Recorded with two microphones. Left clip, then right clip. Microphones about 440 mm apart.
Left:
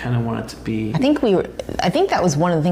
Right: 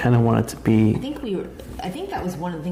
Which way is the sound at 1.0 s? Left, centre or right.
Left.